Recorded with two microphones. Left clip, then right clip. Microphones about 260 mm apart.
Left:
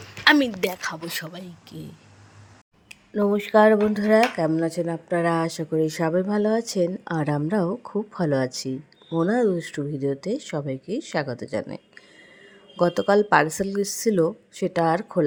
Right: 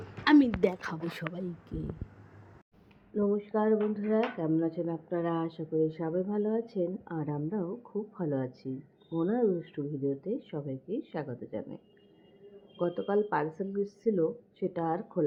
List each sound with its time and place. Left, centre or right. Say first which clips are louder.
0.3 s speech: left 6 dB; centre
0.7 s speech: left 7 dB; centre
1.3 s speech: even; centre
3.2 s speech: left 12 dB; left
12.8 s speech: left 10 dB; left